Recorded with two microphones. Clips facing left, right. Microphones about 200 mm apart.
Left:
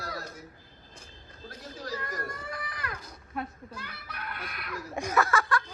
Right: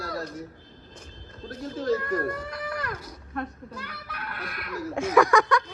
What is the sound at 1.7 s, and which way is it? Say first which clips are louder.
Speech: right 12 dB; 55° right (ahead or behind).